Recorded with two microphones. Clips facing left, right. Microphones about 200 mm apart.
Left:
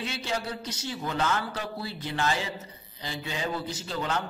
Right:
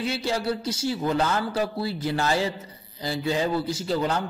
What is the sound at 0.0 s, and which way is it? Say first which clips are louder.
A man's voice: right 6 dB; 35° right (ahead or behind).